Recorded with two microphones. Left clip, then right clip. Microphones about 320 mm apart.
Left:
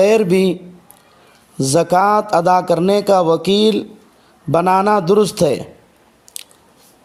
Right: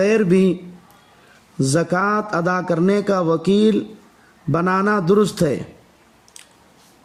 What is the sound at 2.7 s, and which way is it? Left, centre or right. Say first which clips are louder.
Speech: left 5 dB; left.